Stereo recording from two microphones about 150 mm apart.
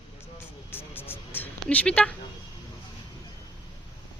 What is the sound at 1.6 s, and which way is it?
Speech, 5° left (ahead or behind).